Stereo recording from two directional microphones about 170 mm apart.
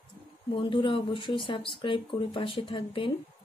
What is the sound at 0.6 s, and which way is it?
Speech, 30° left (ahead or behind).